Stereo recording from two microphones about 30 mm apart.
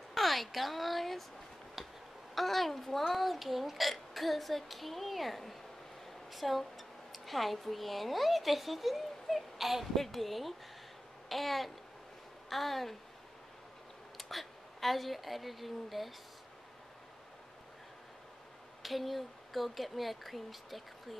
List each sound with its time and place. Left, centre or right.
0.1 s speech: centre
2.3 s a woman's voice: centre
11.2 s babbling: centre
12.4 s speech: centre
14.1 s a woman's voice: centre
18.8 s speech: centre